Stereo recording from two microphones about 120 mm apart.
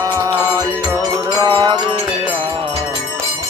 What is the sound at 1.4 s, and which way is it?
Music, 35° right (ahead or behind).